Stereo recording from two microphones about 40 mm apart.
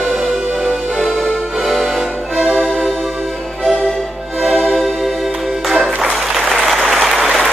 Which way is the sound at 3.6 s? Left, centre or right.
Centre.